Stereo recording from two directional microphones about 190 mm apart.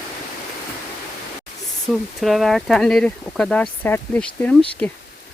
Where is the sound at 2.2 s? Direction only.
Centre (ahead or behind).